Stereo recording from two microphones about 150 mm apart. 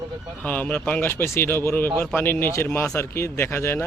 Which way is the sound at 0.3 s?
10° left (ahead or behind).